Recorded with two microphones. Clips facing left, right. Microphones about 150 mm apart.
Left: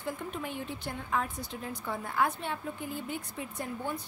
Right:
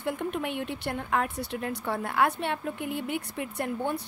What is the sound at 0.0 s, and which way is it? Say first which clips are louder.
A woman's voice: right 6 dB; 65° right (ahead or behind).